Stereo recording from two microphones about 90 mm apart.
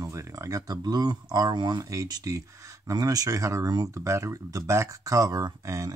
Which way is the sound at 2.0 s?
45° right (ahead or behind).